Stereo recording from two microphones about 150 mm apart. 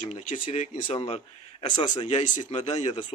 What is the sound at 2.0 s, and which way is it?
A man's voice, 45° left (ahead or behind).